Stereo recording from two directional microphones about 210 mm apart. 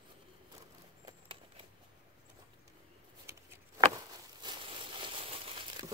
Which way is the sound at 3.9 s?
20° right (ahead or behind).